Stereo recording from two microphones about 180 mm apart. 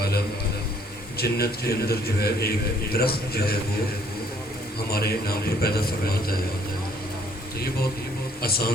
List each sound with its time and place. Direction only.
1.2 s a man's voice: 60° left (ahead or behind)
4.9 s a man's voice: 60° left (ahead or behind)
8.4 s a man's voice: 60° left (ahead or behind)